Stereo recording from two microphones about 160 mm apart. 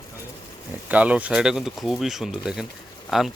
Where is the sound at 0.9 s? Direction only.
10° right (ahead or behind).